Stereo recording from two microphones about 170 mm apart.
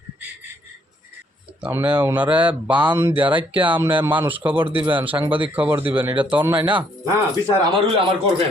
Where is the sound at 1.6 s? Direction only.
10° right (ahead or behind).